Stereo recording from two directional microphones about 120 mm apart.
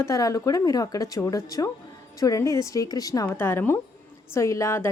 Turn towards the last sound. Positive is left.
turn(degrees=25)  # may be behind; listen again after turning